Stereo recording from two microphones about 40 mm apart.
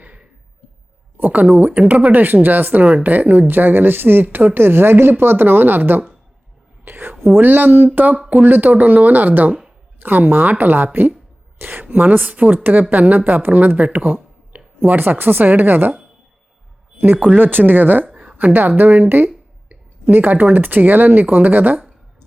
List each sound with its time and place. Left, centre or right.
0.0 s a sound: right
1.1 s a woman's voice: right
6.8 s whispering: right
7.3 s a woman's voice: right
7.9 s a woman's voice: right
12.2 s a woman's voice: right
17.3 s a woman's voice: right
18.1 s a sound: right
18.3 s a woman's voice: right